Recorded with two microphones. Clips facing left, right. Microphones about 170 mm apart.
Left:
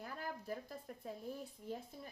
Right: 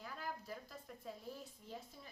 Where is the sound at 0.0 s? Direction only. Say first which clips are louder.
Left 2 dB; 50° left (ahead or behind).